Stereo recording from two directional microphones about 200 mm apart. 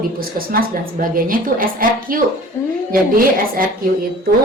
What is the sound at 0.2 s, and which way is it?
A woman's voice, 45° right (ahead or behind).